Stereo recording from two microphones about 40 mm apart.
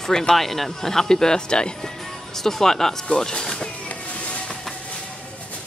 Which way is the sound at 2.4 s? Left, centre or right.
Centre.